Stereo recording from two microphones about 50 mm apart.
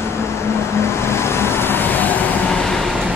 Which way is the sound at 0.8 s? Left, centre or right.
Left.